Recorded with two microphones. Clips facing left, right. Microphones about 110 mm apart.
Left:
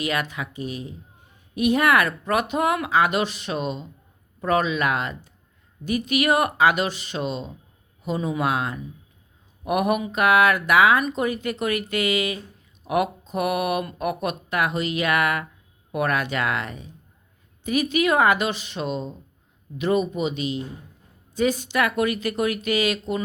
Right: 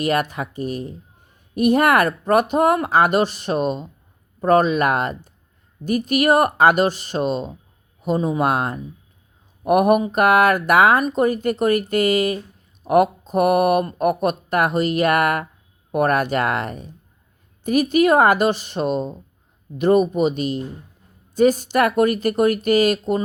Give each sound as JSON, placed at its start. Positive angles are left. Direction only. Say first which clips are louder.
{"t": 0.0, "sound": "speech", "louder": "right 6 dB", "side_deg": -45}
{"t": 12.8, "sound": "a sound", "louder": "right 7 dB", "side_deg": -45}
{"t": 13.3, "sound": "speech", "louder": "right 8 dB", "side_deg": -45}